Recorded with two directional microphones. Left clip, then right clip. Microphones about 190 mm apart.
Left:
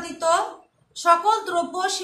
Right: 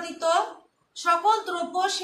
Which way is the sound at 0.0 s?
15° left (ahead or behind).